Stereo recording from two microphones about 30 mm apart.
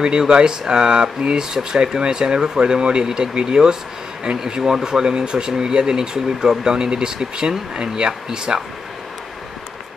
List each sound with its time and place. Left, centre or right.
0.3 s speech: right
8.1 s speech: centre